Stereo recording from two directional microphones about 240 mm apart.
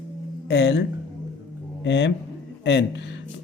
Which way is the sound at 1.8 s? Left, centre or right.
Left.